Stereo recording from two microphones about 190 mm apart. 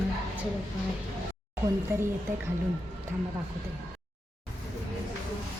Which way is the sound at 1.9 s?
10° right (ahead or behind).